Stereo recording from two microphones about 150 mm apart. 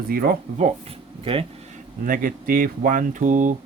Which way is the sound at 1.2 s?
40° right (ahead or behind).